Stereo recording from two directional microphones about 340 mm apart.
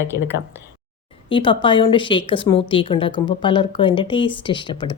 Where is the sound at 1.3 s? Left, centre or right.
Centre.